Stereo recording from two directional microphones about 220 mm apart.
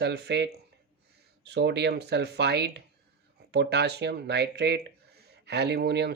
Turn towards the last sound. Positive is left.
turn(degrees=-50)  # may be behind; listen again after turning